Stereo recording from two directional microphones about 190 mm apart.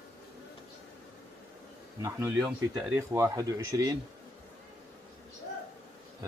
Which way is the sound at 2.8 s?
15° right (ahead or behind).